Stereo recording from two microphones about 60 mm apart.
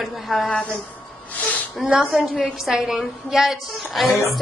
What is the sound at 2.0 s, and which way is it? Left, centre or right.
A man's voice, centre.